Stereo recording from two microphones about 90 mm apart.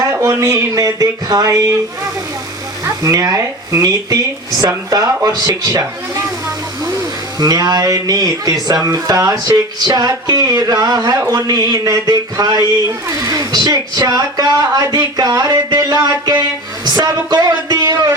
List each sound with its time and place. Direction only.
0.0 s speech: 35° right (ahead or behind)
3.0 s speech: 40° right (ahead or behind)
7.3 s speech: 50° right (ahead or behind)